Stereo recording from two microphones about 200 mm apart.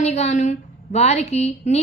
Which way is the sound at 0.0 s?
35° left (ahead or behind).